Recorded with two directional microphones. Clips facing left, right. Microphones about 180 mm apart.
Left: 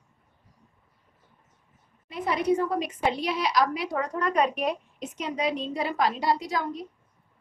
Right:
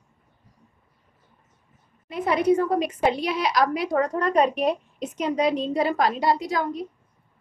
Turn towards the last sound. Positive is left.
turn(degrees=-55)  # may be behind; listen again after turning